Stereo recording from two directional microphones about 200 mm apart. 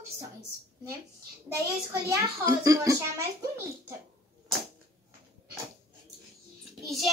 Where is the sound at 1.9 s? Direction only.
15° right (ahead or behind).